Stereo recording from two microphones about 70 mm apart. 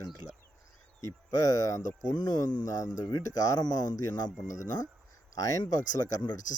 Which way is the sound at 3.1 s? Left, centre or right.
Left.